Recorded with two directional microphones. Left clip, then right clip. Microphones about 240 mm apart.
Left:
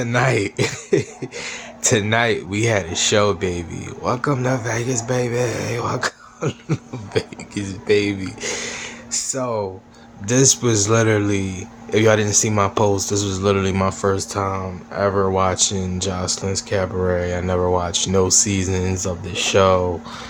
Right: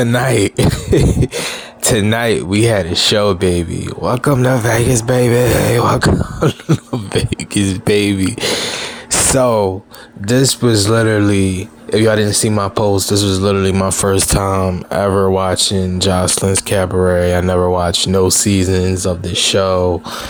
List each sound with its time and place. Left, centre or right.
0.0 s speech: right
10.2 s speech: right